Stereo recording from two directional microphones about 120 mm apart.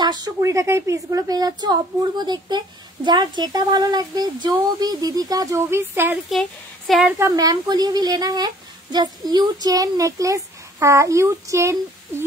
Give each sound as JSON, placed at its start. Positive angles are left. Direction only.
{"t": 0.0, "sound": "a sound", "side_deg": -35}
{"t": 0.4, "sound": "a woman's voice", "side_deg": -25}
{"t": 7.2, "sound": "a woman's voice", "side_deg": -30}